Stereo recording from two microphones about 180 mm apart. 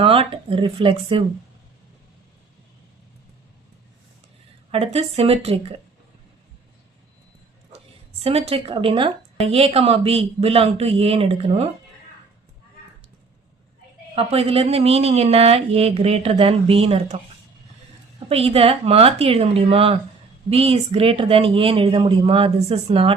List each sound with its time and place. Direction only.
0.0 s a woman's voice: 30° right (ahead or behind)
4.7 s a woman's voice: 35° right (ahead or behind)
8.2 s a woman's voice: 35° right (ahead or behind)
14.2 s a woman's voice: 35° right (ahead or behind)
18.3 s a woman's voice: 35° right (ahead or behind)